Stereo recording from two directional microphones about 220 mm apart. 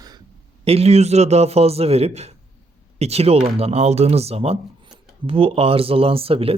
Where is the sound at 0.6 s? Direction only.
25° right (ahead or behind).